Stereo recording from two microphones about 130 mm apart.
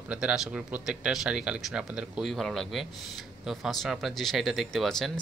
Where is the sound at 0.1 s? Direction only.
5° right (ahead or behind).